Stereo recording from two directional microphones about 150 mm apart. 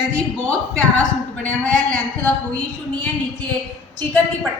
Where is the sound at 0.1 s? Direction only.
10° left (ahead or behind).